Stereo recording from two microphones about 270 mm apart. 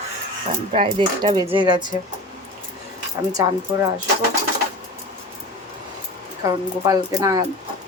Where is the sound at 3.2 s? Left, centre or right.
Centre.